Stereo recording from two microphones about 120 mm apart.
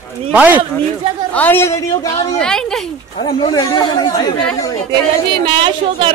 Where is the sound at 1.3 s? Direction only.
15° left (ahead or behind).